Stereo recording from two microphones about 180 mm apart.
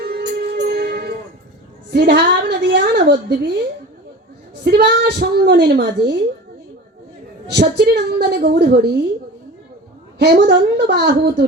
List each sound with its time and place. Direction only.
0.0 s music: 60° right (ahead or behind)
1.9 s a woman's voice: 65° right (ahead or behind)
4.6 s a woman's voice: 65° right (ahead or behind)
7.5 s a woman's voice: 65° right (ahead or behind)
10.2 s a woman's voice: 70° right (ahead or behind)